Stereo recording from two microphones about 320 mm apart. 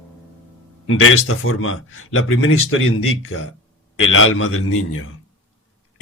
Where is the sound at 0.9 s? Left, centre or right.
Left.